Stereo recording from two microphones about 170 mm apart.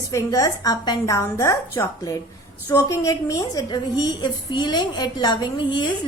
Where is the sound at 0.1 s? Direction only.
20° left (ahead or behind).